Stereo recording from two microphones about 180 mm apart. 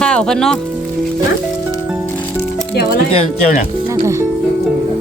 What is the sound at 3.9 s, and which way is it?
Speech, 15° right (ahead or behind).